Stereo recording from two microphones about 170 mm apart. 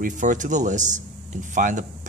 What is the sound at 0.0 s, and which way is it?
Speech, 50° right (ahead or behind).